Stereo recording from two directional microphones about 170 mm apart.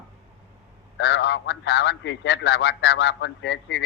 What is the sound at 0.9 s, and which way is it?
A man's voice, 90° left.